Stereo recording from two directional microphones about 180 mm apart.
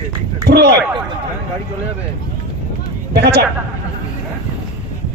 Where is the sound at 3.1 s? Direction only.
65° right (ahead or behind).